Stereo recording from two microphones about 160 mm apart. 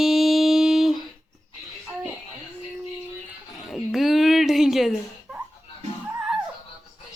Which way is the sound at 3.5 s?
Centre (ahead or behind).